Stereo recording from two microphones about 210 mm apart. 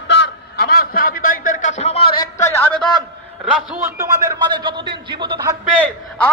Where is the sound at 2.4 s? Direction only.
10° left (ahead or behind).